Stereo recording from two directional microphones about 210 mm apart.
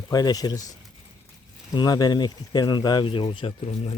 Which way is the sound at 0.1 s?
20° left (ahead or behind).